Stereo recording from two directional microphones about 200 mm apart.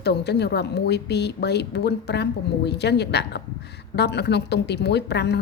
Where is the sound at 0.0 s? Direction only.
55° left (ahead or behind).